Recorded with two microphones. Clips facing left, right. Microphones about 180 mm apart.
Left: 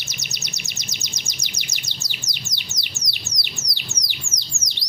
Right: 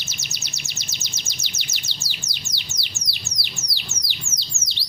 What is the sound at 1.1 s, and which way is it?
Bird, 15° left (ahead or behind).